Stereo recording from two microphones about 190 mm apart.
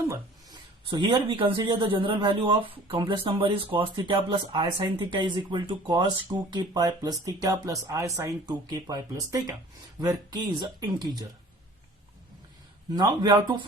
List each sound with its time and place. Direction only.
0.0 s a sound: 15° right (ahead or behind)
0.9 s speech: 25° right (ahead or behind)
12.9 s speech: 20° right (ahead or behind)